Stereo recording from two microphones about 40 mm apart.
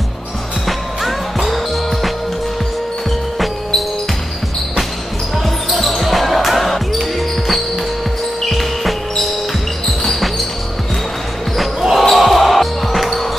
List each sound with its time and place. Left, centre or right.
0.7 s music: centre
5.7 s basketball bounce: centre
8.5 s music: centre
11.8 s basketball bounce: centre